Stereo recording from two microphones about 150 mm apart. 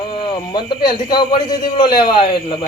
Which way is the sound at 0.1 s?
30° left (ahead or behind).